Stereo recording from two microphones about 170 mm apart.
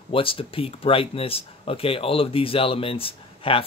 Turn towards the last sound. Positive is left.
turn(degrees=35)  # may be behind; listen again after turning